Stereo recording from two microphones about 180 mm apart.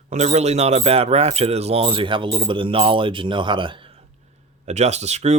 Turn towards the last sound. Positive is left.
turn(degrees=-40)  # may be behind; listen again after turning